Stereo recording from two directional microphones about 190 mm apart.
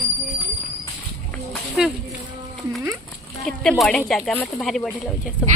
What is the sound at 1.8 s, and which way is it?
Speech, centre (ahead or behind).